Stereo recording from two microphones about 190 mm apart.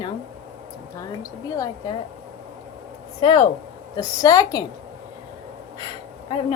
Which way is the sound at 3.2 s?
25° left (ahead or behind).